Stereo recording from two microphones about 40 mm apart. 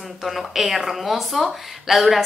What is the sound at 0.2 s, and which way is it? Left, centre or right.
Speech, centre.